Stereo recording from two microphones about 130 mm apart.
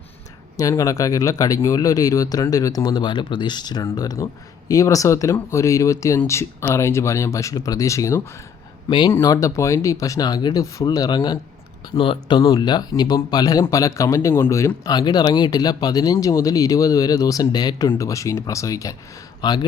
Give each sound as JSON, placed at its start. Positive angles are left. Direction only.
{"t": 0.5, "sound": "speech", "side_deg": 25}
{"t": 8.9, "sound": "speech", "side_deg": 35}
{"t": 9.1, "sound": "speech", "side_deg": 25}
{"t": 14.8, "sound": "speech", "side_deg": 30}